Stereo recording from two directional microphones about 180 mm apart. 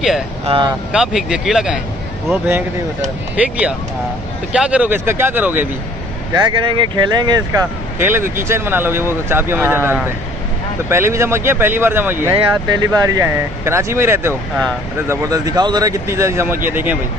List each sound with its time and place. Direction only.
0.4 s speech: 30° right (ahead or behind)
0.9 s speech: 5° right (ahead or behind)
6.3 s speech: 25° right (ahead or behind); by 12.3 s 10° right (ahead or behind)
12.3 s speech: 20° right (ahead or behind)